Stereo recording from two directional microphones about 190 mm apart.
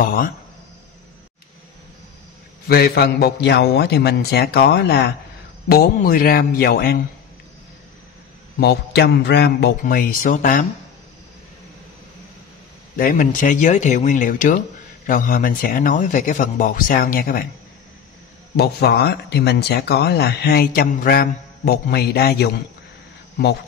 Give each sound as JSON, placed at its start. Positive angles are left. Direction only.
{"t": 0.0, "sound": "speech", "side_deg": 50}
{"t": 2.7, "sound": "speech", "side_deg": 55}
{"t": 8.5, "sound": "speech", "side_deg": 60}
{"t": 12.9, "sound": "speech", "side_deg": 50}
{"t": 18.6, "sound": "speech", "side_deg": 60}